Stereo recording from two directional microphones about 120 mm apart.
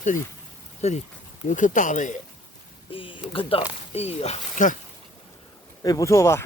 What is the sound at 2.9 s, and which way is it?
Speech, 45° left (ahead or behind).